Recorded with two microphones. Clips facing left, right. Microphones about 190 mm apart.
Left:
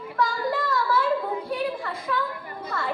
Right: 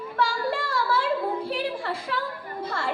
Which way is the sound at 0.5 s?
30° right (ahead or behind).